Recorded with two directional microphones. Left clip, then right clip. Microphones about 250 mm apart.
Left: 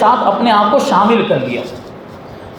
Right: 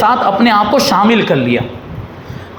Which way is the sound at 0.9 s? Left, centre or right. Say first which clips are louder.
Even; right.